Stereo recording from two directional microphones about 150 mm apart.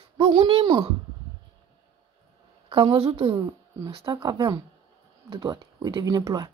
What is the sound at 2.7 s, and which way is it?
Speech, 40° right (ahead or behind).